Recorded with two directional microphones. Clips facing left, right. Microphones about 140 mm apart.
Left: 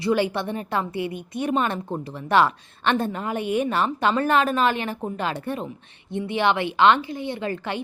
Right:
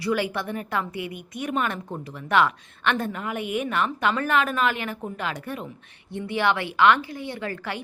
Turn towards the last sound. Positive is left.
turn(degrees=25)  # may be behind; listen again after turning